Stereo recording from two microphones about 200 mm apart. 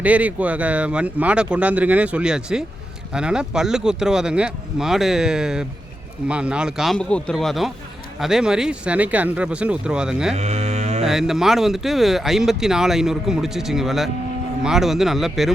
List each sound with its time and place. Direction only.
0.0 s speech: 5° right (ahead or behind)
10.3 s cattle: 30° right (ahead or behind)
11.0 s speech: centre (ahead or behind)